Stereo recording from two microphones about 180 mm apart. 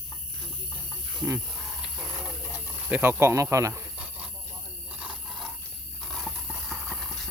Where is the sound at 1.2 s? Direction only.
20° right (ahead or behind).